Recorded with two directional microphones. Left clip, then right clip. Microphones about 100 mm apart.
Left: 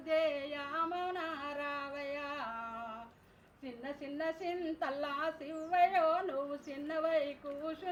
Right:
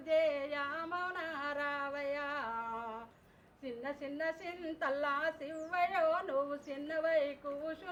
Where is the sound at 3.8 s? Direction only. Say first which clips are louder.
Even; 35° right (ahead or behind).